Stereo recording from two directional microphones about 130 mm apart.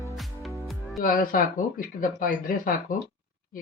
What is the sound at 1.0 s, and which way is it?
Speech, 90° left.